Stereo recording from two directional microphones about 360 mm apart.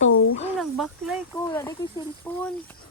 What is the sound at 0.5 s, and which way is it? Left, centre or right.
Speech, centre.